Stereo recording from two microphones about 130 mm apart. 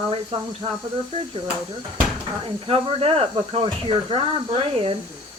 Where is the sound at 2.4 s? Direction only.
45° right (ahead or behind).